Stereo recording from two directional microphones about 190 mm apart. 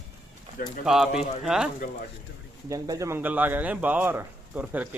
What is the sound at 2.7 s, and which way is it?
Speech, 15° right (ahead or behind).